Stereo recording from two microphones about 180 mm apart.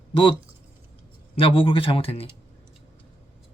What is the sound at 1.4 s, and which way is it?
Speech, 30° left (ahead or behind).